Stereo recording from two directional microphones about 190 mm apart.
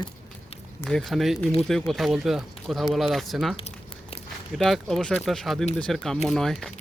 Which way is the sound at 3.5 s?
30° left (ahead or behind).